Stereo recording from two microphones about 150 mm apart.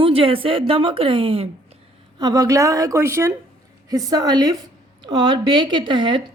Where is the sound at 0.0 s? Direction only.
40° right (ahead or behind).